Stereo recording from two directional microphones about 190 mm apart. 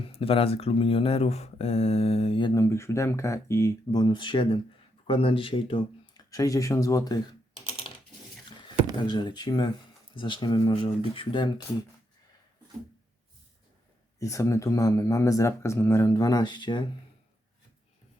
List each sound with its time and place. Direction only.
0.0 s speech: 30° left (ahead or behind)
9.0 s speech: 25° left (ahead or behind)
14.2 s speech: 15° left (ahead or behind)